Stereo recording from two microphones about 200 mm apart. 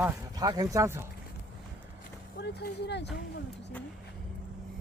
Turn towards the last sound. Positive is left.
turn(degrees=60)  # may be behind; listen again after turning